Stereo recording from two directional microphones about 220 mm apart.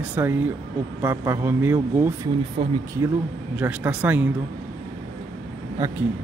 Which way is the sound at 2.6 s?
25° right (ahead or behind).